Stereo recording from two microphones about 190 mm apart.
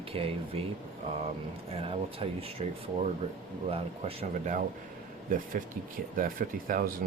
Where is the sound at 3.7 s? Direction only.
30° right (ahead or behind).